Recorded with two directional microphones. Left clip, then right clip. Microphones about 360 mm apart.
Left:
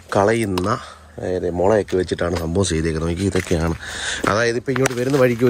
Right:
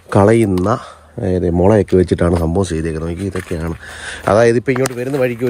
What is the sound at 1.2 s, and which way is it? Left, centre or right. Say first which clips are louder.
Speech: right 4 dB; right.